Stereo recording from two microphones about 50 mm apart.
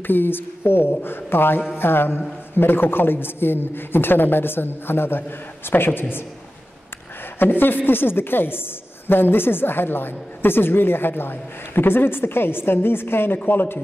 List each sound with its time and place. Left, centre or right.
0.0 s a woman's voice: left
7.3 s a woman's voice: left